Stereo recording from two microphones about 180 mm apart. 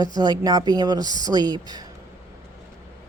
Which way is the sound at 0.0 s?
20° right (ahead or behind).